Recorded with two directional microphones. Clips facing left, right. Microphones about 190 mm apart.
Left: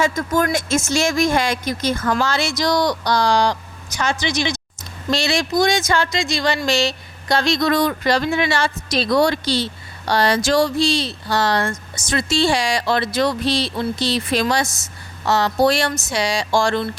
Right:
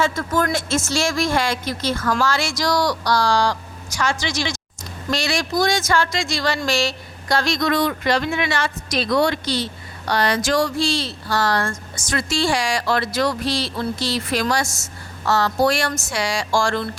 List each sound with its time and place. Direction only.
0.0 s a woman's voice: 15° left (ahead or behind)
7.7 s a woman's voice: 40° left (ahead or behind); by 16.8 s 20° left (ahead or behind)